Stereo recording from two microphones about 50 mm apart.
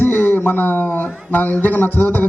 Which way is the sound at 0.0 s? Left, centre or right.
Left.